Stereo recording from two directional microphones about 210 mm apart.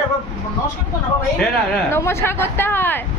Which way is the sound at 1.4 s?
10° left (ahead or behind).